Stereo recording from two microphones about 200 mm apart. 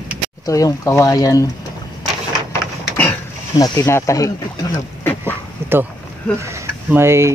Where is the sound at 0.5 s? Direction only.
15° left (ahead or behind).